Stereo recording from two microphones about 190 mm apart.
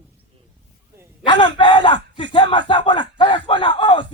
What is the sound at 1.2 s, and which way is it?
Speech, 25° left (ahead or behind).